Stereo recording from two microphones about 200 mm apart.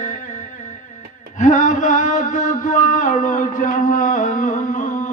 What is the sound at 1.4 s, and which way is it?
Mantra, 40° left (ahead or behind).